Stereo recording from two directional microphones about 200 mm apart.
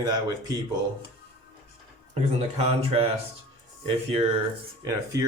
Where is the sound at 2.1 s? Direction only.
30° right (ahead or behind).